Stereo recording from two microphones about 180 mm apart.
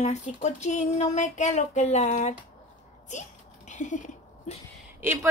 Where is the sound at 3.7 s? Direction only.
45° left (ahead or behind).